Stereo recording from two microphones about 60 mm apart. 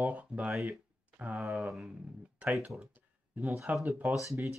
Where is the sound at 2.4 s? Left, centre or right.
Right.